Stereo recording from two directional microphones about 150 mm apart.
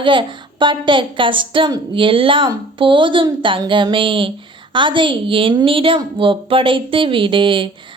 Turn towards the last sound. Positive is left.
turn(degrees=-35)  # may be behind; listen again after turning